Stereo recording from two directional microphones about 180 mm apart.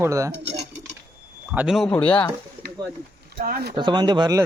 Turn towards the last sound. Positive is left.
turn(degrees=-20)  # may be behind; listen again after turning